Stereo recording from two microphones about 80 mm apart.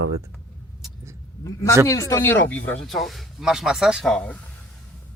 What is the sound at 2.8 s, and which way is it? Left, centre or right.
Speech, centre.